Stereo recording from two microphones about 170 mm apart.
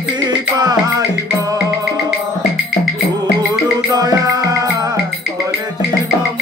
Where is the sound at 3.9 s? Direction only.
20° right (ahead or behind).